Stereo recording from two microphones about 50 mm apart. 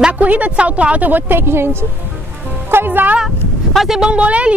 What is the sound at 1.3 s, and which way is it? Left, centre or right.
A woman's voice, right.